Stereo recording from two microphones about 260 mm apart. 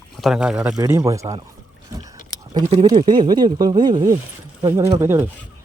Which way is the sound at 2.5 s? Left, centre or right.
Centre.